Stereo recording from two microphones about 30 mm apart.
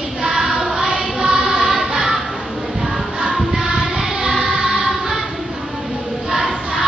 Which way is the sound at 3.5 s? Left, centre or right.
Right.